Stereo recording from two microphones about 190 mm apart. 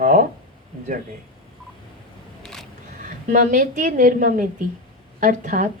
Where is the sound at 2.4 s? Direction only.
Centre (ahead or behind).